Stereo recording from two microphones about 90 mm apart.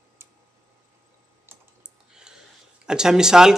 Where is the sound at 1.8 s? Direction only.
5° right (ahead or behind).